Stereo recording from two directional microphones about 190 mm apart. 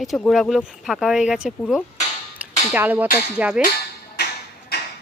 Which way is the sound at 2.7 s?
10° right (ahead or behind).